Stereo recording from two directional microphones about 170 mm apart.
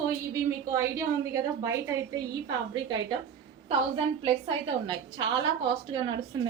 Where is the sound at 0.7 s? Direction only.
15° right (ahead or behind).